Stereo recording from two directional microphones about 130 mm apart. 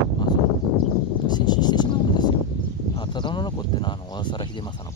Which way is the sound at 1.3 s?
35° left (ahead or behind).